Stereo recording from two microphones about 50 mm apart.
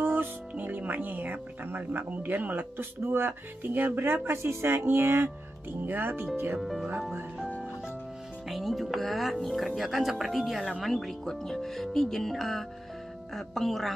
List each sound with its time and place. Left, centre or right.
0.0 s speech: right
4.0 s speech: right
6.6 s speech: centre
8.5 s speech: centre